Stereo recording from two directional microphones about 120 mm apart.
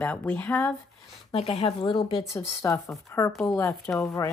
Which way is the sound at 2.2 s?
30° left (ahead or behind).